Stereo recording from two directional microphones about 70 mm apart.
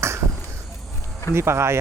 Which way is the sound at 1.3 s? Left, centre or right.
Right.